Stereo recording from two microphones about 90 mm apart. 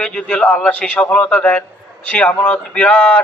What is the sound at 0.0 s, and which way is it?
A man's voice, 10° left (ahead or behind).